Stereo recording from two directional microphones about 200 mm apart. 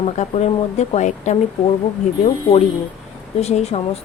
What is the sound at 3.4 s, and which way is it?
Speech, 30° left (ahead or behind).